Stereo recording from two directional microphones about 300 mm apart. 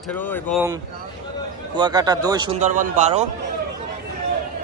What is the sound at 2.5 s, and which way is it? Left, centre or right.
Speech, right.